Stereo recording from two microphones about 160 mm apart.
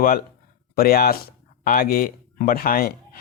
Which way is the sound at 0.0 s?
65° left (ahead or behind).